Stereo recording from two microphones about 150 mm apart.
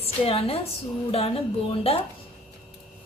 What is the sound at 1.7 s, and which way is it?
Speech, 40° left (ahead or behind).